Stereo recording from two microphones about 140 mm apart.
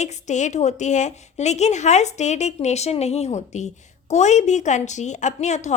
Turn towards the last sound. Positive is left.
turn(degrees=55)  # may be behind; listen again after turning